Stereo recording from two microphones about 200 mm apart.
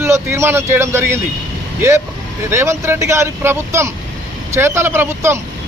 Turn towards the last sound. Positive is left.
turn(degrees=-10)  # may be behind; listen again after turning